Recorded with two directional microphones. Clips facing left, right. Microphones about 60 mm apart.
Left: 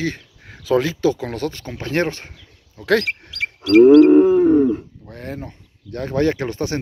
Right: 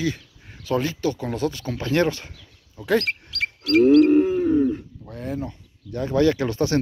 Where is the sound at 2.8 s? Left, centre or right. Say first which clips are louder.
Left 5 dB; left.